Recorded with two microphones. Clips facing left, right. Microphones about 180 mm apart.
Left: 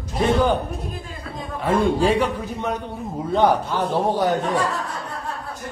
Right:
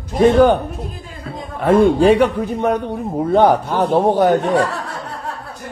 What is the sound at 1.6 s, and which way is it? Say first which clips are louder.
A man's voice: right 7 dB; 60° right (ahead or behind).